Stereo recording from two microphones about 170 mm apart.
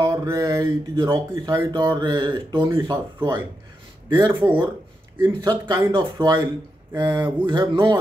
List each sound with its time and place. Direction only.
0.0 s speech: 20° right (ahead or behind)
2.7 s speech: 15° right (ahead or behind)
5.4 s speech: 25° right (ahead or behind)
7.4 s speech: 25° right (ahead or behind)